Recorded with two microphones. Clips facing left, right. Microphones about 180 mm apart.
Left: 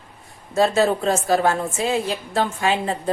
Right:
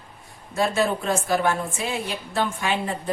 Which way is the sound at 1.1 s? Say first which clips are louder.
Left 3 dB; 30° left (ahead or behind).